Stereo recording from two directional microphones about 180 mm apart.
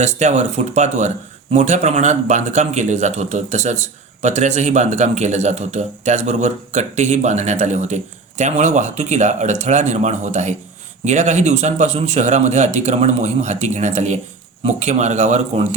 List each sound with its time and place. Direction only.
0.0 s a man's voice: 40° right (ahead or behind)